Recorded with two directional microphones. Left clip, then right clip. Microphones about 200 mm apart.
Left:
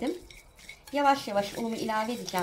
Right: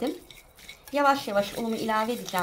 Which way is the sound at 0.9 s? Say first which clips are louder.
Right 2 dB; 30° right (ahead or behind).